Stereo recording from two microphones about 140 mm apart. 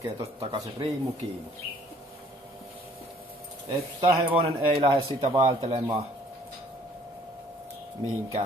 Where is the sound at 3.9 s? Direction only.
40° right (ahead or behind).